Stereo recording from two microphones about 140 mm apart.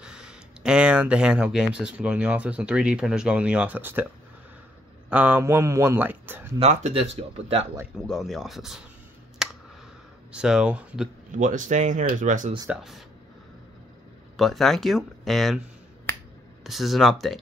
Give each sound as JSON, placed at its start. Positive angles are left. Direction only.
{"t": 0.0, "sound": "speech", "side_deg": -5}
{"t": 5.1, "sound": "a man's voice", "side_deg": -10}
{"t": 6.6, "sound": "speech", "side_deg": -50}
{"t": 8.1, "sound": "speech", "side_deg": 0}
{"t": 9.4, "sound": "a sound", "side_deg": -5}
{"t": 10.3, "sound": "speech", "side_deg": -5}
{"t": 11.3, "sound": "speech", "side_deg": -65}
{"t": 12.6, "sound": "speech", "side_deg": 0}
{"t": 14.3, "sound": "speech", "side_deg": 0}
{"t": 16.6, "sound": "speech", "side_deg": 0}